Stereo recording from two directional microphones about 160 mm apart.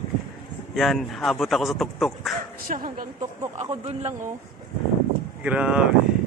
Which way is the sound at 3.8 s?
45° right (ahead or behind).